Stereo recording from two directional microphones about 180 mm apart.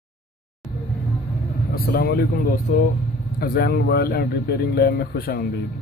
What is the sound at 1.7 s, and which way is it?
Speech, 60° left (ahead or behind).